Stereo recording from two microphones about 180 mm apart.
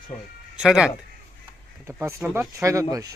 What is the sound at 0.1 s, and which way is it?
Speech, 10° left (ahead or behind).